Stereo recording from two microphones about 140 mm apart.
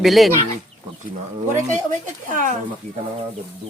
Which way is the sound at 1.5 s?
60° right (ahead or behind).